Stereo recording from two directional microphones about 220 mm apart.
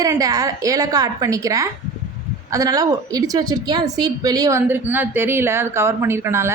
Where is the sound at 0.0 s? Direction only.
15° right (ahead or behind).